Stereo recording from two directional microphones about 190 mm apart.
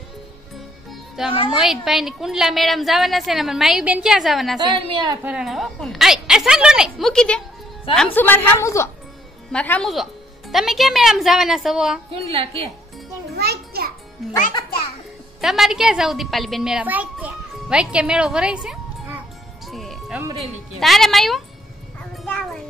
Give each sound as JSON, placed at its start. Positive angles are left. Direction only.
{"t": 1.2, "sound": "a woman's voice", "side_deg": 0}
{"t": 4.6, "sound": "a woman's voice", "side_deg": -25}
{"t": 5.2, "sound": "a woman's voice", "side_deg": -5}
{"t": 12.1, "sound": "a woman's voice", "side_deg": -30}
{"t": 13.3, "sound": "a sound", "side_deg": -60}
{"t": 15.4, "sound": "a woman's voice", "side_deg": 0}
{"t": 22.1, "sound": "music", "side_deg": 0}